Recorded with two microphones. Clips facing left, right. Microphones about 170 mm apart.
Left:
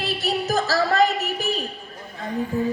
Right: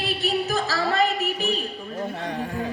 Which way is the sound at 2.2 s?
70° right (ahead or behind).